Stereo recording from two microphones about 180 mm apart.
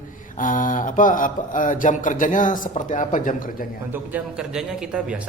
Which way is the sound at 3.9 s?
5° right (ahead or behind).